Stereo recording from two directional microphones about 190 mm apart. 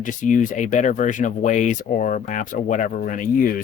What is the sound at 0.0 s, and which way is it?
Speech, 45° left (ahead or behind).